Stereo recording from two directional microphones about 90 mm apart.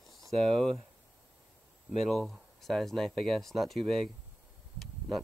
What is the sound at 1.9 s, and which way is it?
Speech, centre (ahead or behind).